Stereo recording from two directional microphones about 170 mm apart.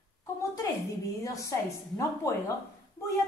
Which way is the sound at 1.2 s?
20° left (ahead or behind).